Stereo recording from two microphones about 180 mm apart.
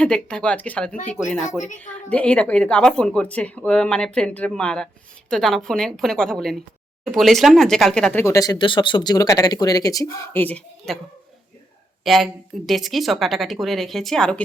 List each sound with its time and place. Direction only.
0.0 s a woman's voice: 5° left (ahead or behind)
1.5 s a woman's voice: 45° left (ahead or behind)
1.8 s a woman's voice: 5° left (ahead or behind)
12.0 s a woman's voice: centre (ahead or behind)